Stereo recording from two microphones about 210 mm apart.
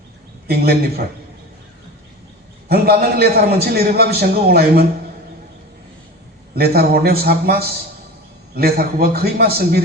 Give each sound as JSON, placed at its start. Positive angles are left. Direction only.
{"t": 0.4, "sound": "a man's voice", "side_deg": -45}
{"t": 2.6, "sound": "a man's voice", "side_deg": -50}
{"t": 6.6, "sound": "a man's voice", "side_deg": -45}